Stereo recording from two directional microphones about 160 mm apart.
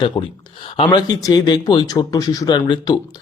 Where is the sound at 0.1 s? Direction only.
20° left (ahead or behind).